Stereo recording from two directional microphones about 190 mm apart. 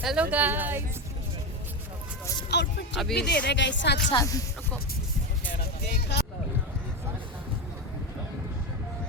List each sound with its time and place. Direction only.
0.0 s speech: 5° right (ahead or behind)
2.5 s speech: 65° left (ahead or behind)
4.1 s speech: 20° left (ahead or behind)
5.5 s music: 55° left (ahead or behind)